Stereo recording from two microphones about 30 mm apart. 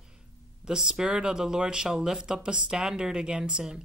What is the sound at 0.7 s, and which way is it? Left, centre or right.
Speech, right.